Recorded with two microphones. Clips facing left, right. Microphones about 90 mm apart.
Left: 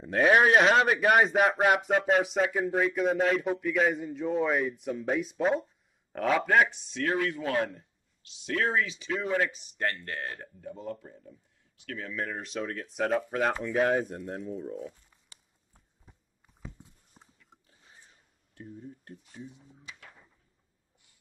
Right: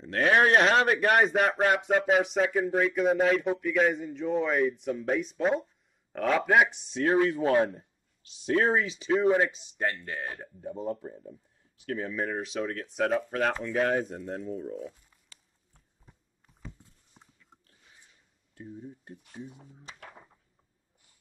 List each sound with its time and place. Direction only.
0.0 s speech: 5° left (ahead or behind)
6.9 s speech: 25° right (ahead or behind)
9.8 s speech: 10° right (ahead or behind)
10.8 s speech: 25° right (ahead or behind)
12.2 s speech: 5° right (ahead or behind)
15.0 s a sound: 5° left (ahead or behind)
19.2 s speech: 55° right (ahead or behind)